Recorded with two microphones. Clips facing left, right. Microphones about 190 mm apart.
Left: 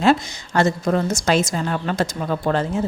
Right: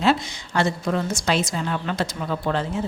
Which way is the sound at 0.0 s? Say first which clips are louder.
Left 4 dB; 45° left (ahead or behind).